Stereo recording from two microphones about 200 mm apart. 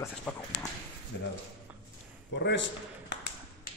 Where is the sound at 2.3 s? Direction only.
60° left (ahead or behind).